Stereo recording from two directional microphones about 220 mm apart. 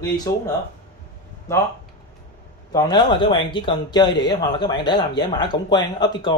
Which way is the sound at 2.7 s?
20° left (ahead or behind).